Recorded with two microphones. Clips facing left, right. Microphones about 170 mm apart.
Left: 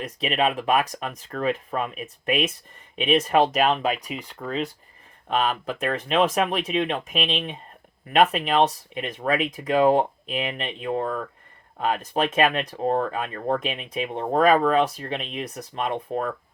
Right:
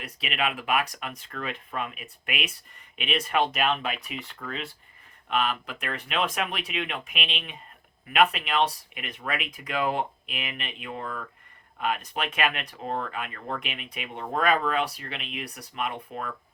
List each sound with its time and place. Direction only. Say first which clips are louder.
0.0 s speech: left 7 dB; 40° left (ahead or behind)